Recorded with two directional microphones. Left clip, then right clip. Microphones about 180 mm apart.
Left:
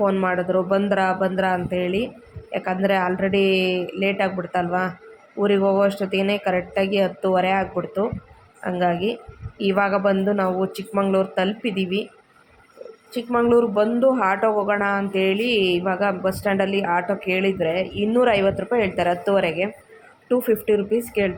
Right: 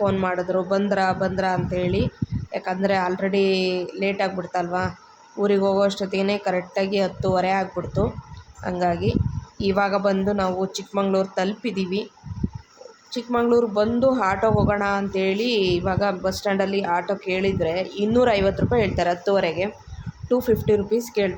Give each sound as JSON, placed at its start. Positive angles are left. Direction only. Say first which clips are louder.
{"t": 0.0, "sound": "speech", "louder": "left 2 dB", "side_deg": 10}
{"t": 13.1, "sound": "speech", "louder": "left 2 dB", "side_deg": 15}